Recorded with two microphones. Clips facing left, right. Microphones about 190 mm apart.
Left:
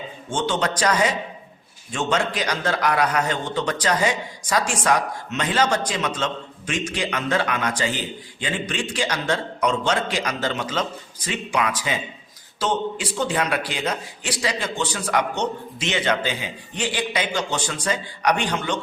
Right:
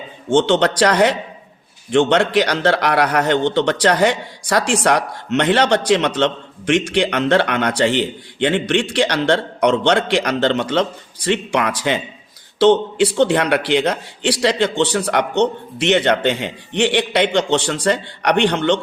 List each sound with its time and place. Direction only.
0.3 s a man's voice: 75° right (ahead or behind)